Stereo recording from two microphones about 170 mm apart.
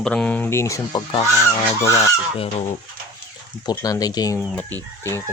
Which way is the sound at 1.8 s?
20° left (ahead or behind).